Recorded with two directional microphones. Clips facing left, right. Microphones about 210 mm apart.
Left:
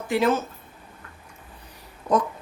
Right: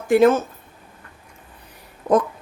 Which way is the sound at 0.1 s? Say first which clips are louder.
Right 8 dB; 50° right (ahead or behind).